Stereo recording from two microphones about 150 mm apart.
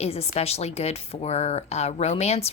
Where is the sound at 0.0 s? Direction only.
45° left (ahead or behind).